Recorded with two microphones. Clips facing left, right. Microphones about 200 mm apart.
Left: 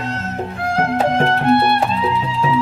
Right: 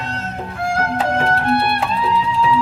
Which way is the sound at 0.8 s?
25° left (ahead or behind).